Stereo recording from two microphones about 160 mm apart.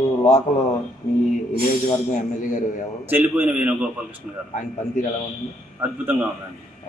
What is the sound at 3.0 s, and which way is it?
A man's voice, 10° right (ahead or behind).